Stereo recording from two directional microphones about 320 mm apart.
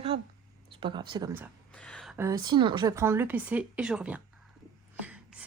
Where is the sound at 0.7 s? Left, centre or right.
Centre.